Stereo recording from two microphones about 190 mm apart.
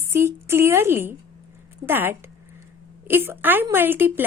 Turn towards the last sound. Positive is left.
turn(degrees=-10)  # may be behind; listen again after turning